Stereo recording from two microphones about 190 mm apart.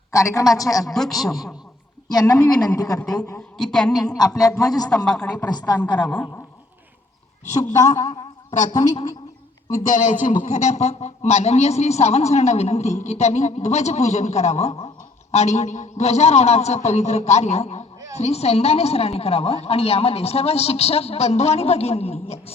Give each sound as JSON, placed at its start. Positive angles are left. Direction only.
{"t": 0.1, "sound": "a woman's voice", "side_deg": 15}
{"t": 0.9, "sound": "a woman's voice", "side_deg": 0}
{"t": 2.0, "sound": "a woman's voice", "side_deg": 20}
{"t": 3.2, "sound": "a woman's voice", "side_deg": 5}
{"t": 4.4, "sound": "a woman's voice", "side_deg": 20}
{"t": 4.9, "sound": "a woman's voice", "side_deg": 5}
{"t": 5.3, "sound": "a woman's voice", "side_deg": 20}
{"t": 7.4, "sound": "a man's voice", "side_deg": 35}
{"t": 8.0, "sound": "a sound", "side_deg": 25}
{"t": 8.7, "sound": "a woman's voice", "side_deg": 20}
{"t": 9.8, "sound": "a man's voice", "side_deg": 40}